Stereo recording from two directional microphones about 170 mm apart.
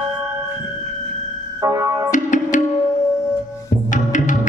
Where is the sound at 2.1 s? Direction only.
45° left (ahead or behind).